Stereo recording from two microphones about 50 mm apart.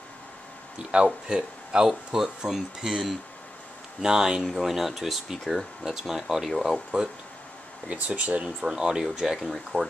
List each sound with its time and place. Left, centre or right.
0.7 s speech: centre
4.5 s speech: centre
7.9 s speech: right
8.5 s speech: centre